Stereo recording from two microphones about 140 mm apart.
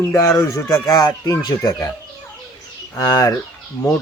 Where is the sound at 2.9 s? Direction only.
25° left (ahead or behind).